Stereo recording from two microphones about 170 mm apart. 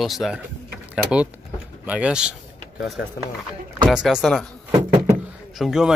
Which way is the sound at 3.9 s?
Centre (ahead or behind).